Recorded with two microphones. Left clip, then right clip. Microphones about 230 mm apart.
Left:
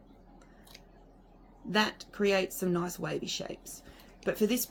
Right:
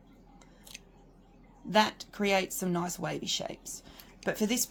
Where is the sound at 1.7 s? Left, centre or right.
Right.